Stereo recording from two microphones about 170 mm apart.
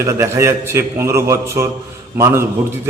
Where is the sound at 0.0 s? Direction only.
15° right (ahead or behind).